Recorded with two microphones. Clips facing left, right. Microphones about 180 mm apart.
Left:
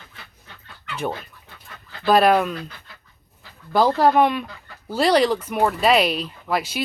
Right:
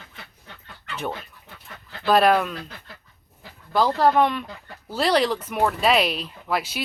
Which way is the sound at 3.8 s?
15° left (ahead or behind).